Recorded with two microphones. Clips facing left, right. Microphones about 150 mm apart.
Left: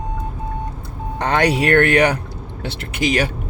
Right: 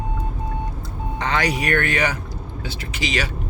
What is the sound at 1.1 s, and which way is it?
Speech, 55° left (ahead or behind).